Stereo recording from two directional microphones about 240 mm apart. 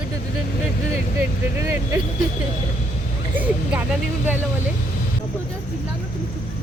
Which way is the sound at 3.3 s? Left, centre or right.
Centre.